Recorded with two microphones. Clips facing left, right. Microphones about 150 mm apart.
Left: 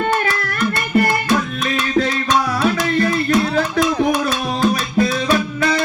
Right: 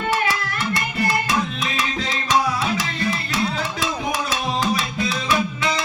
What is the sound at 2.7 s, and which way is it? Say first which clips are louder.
Music: left 7 dB; 50° left (ahead or behind).